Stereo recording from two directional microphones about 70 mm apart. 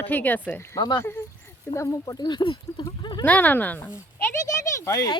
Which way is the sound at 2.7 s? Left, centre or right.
Left.